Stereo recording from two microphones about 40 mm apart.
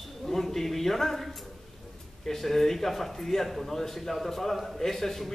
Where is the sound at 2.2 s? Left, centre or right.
Centre.